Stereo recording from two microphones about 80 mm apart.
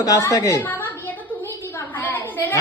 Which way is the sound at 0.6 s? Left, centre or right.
Left.